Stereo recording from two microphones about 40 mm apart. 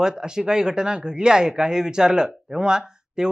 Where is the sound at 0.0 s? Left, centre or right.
Centre.